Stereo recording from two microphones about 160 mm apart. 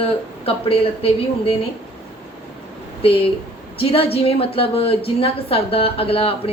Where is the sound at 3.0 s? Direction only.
35° left (ahead or behind).